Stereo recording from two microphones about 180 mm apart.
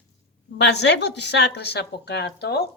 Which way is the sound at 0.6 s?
70° left (ahead or behind).